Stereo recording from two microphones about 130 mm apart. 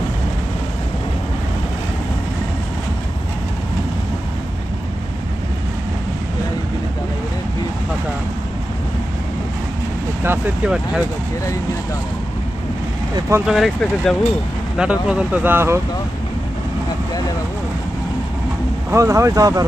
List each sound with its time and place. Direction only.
10.2 s speech: 15° right (ahead or behind)
13.4 s speech: centre (ahead or behind)
14.8 s speech: 10° right (ahead or behind)
18.9 s speech: 20° right (ahead or behind)